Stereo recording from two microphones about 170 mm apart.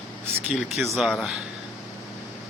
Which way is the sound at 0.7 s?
Centre (ahead or behind).